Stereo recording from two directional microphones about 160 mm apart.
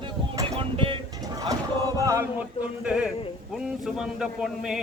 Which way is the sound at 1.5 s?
20° right (ahead or behind).